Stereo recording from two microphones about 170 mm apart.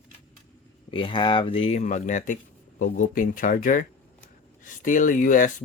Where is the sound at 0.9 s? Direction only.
30° left (ahead or behind).